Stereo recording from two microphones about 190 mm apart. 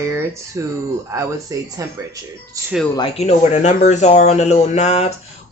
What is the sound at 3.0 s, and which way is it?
Speech, 30° left (ahead or behind).